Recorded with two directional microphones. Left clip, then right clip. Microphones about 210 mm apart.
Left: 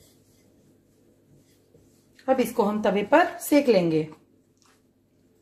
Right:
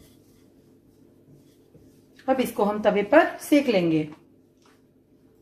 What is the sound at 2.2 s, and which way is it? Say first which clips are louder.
A woman's voice: even; 35° left (ahead or behind).